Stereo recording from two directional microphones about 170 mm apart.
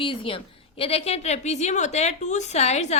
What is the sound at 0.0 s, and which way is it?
A woman's voice, 30° left (ahead or behind).